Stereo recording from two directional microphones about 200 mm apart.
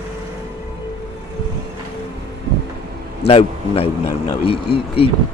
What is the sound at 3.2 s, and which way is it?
A man's voice, 30° left (ahead or behind).